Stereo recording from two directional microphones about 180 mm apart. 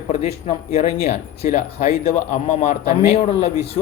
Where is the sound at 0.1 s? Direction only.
35° left (ahead or behind).